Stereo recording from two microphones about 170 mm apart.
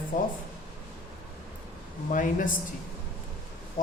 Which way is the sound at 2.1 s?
50° left (ahead or behind).